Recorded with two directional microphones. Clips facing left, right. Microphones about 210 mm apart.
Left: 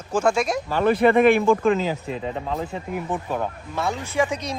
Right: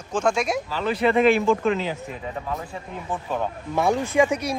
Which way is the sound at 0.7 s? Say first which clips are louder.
Left 8 dB; 55° left (ahead or behind).